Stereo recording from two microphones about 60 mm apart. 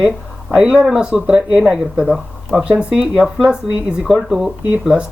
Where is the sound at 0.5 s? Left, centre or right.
Centre.